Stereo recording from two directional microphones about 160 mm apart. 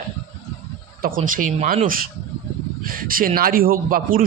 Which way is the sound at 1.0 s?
60° right (ahead or behind).